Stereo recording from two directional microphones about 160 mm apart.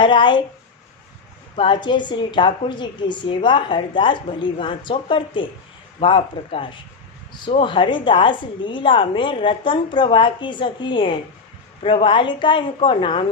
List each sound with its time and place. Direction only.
0.0 s speech: 30° left (ahead or behind)
1.5 s a woman's voice: 30° left (ahead or behind)